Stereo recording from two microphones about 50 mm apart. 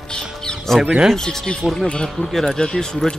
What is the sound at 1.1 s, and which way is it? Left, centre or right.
Speech, centre.